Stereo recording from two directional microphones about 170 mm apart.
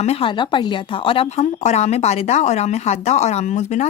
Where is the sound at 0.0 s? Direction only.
35° left (ahead or behind).